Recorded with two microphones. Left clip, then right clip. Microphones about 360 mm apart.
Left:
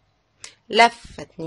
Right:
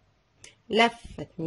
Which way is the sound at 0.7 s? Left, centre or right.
Left.